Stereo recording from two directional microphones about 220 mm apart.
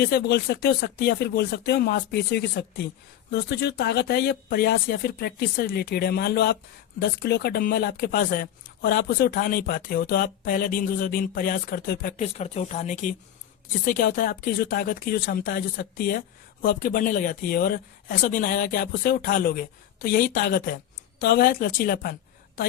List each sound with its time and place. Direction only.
0.0 s speech: 45° left (ahead or behind)